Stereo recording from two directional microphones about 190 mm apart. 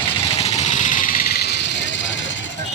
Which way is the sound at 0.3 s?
35° left (ahead or behind).